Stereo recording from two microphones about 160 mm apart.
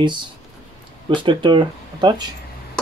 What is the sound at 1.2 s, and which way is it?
Speech, 30° right (ahead or behind).